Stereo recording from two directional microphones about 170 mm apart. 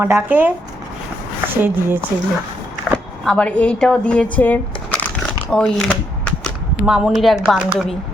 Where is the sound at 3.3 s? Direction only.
5° left (ahead or behind).